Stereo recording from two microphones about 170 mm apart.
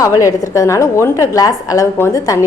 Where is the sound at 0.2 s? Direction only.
20° left (ahead or behind).